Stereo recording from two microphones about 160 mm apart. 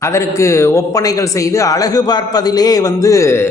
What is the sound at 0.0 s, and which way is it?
A man's voice, 20° left (ahead or behind).